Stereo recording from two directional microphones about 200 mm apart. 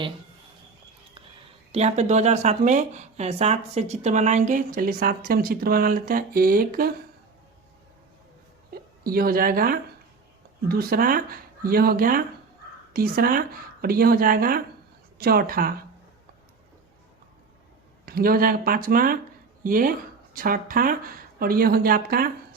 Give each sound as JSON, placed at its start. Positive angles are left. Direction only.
{"t": 1.7, "sound": "speech", "side_deg": -35}
{"t": 9.0, "sound": "speech", "side_deg": -45}
{"t": 18.0, "sound": "speech", "side_deg": -45}